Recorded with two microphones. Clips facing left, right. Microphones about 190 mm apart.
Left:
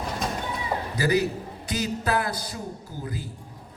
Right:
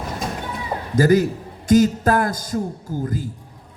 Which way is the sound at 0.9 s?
45° right (ahead or behind).